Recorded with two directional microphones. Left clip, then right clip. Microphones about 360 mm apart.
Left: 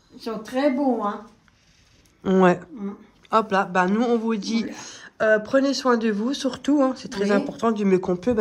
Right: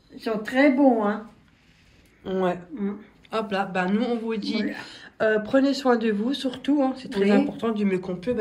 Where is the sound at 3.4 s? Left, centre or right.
Centre.